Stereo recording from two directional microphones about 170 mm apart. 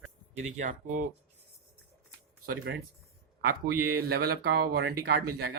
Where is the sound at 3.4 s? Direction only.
65° right (ahead or behind).